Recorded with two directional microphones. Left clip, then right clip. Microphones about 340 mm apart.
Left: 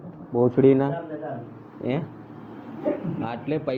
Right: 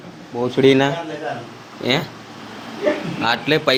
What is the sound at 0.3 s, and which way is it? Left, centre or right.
Speech, centre.